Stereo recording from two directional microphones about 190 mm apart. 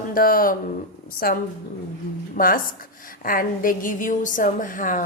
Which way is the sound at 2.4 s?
45° left (ahead or behind).